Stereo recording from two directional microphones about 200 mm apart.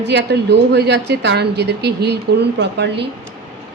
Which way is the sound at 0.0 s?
60° right (ahead or behind).